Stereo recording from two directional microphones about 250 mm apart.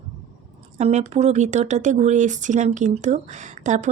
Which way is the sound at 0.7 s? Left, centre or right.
Right.